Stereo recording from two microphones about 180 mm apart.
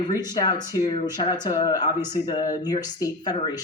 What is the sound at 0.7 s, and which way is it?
Speech, 20° left (ahead or behind).